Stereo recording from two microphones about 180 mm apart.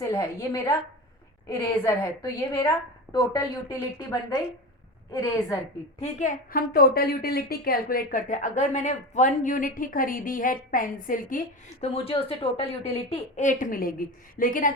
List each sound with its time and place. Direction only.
0.0 s a woman's voice: 20° left (ahead or behind)
6.0 s a woman's voice: 40° left (ahead or behind)
11.8 s a woman's voice: 30° left (ahead or behind); by 14.7 s 50° left (ahead or behind)